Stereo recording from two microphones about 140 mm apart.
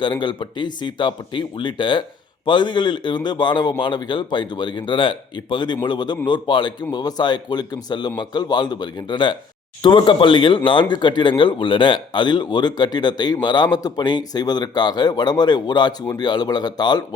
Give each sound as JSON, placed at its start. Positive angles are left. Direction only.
{"t": 0.0, "sound": "speech", "side_deg": 35}